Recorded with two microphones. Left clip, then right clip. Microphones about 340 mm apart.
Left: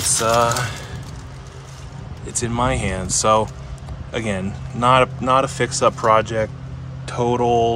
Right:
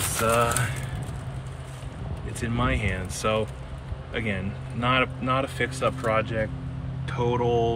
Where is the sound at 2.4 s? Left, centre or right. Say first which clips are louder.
Left 7 dB; centre.